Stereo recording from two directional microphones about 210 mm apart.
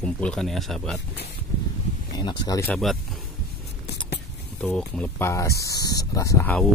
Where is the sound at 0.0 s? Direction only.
5° left (ahead or behind).